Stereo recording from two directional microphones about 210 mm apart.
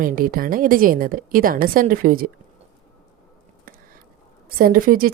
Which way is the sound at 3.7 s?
40° right (ahead or behind).